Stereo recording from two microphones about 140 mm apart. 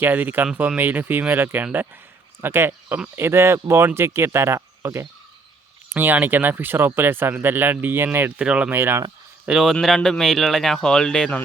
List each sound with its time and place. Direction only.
0.0 s speech: 15° right (ahead or behind)
9.5 s speech: 5° right (ahead or behind)